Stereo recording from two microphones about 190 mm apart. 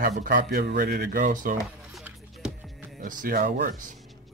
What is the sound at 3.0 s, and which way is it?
Speech, 45° right (ahead or behind).